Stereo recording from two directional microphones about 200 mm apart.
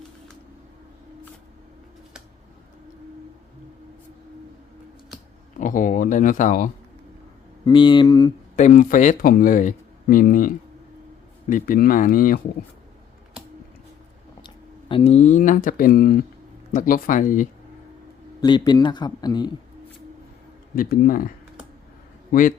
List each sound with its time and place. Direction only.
5.5 s speech: 40° left (ahead or behind)
7.6 s a man's voice: 25° left (ahead or behind)
8.5 s speech: 40° left (ahead or behind)
14.4 s speech: 25° left (ahead or behind)
18.3 s a man's voice: 20° left (ahead or behind)
20.7 s speech: 45° left (ahead or behind)
22.3 s a man's voice: 40° left (ahead or behind)